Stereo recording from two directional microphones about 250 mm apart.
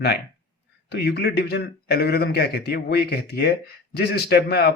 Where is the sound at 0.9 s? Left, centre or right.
Left.